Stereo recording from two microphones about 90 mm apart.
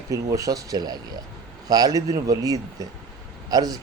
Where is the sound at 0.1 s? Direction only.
40° right (ahead or behind).